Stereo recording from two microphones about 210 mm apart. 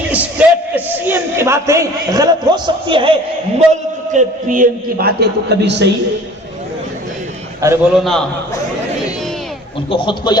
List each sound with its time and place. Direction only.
0.1 s a sound: 5° right (ahead or behind)
0.9 s a man's voice: 10° right (ahead or behind)
3.7 s a man's voice: 35° right (ahead or behind); by 5.9 s 55° right (ahead or behind)
7.6 s a man's voice: 15° right (ahead or behind)
7.9 s a man's voice: centre (ahead or behind)
9.9 s speech: 25° left (ahead or behind)